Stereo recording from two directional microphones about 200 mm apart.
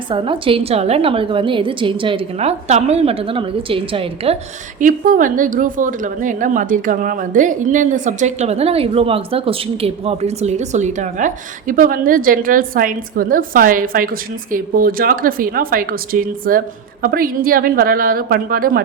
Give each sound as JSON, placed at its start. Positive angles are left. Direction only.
{"t": 0.1, "sound": "a woman's voice", "side_deg": -25}
{"t": 4.8, "sound": "a woman's voice", "side_deg": -40}